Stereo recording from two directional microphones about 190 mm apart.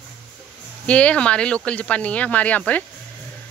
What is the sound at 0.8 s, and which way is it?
Speech, 5° left (ahead or behind).